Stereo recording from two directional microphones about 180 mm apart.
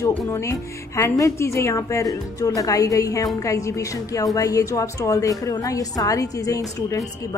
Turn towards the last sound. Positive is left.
turn(degrees=20)  # may be behind; listen again after turning